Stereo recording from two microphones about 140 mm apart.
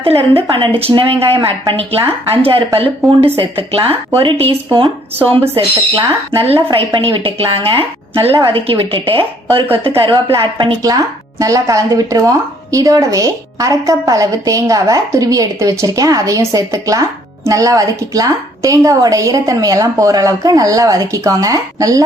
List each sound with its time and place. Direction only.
0.0 s a woman's voice: 40° right (ahead or behind)
10.8 s speech: 25° right (ahead or behind)